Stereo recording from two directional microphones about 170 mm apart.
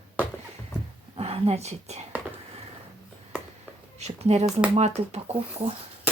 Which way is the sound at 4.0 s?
40° right (ahead or behind).